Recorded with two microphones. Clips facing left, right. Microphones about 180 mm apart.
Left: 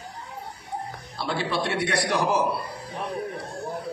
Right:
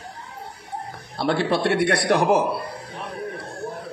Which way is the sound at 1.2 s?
60° right (ahead or behind).